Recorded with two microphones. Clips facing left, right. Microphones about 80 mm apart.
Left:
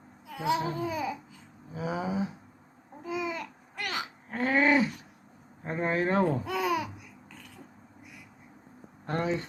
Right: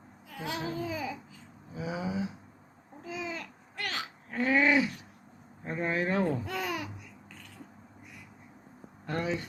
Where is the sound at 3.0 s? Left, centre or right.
Centre.